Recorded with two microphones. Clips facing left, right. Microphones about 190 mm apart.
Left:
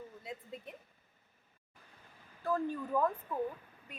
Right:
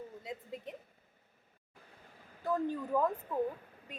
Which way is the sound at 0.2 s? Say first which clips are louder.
Right 1 dB; 20° right (ahead or behind).